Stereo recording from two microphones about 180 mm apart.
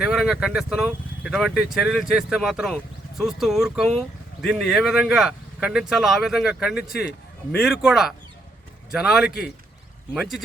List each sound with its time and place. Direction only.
0.0 s speech: centre (ahead or behind)